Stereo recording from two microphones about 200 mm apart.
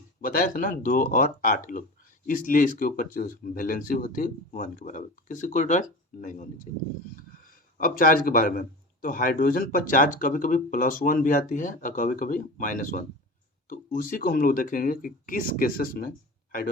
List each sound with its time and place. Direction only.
0.2 s a man's voice: 45° left (ahead or behind)
7.8 s a man's voice: 45° left (ahead or behind)